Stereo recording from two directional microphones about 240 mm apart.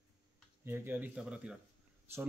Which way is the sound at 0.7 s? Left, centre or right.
Centre.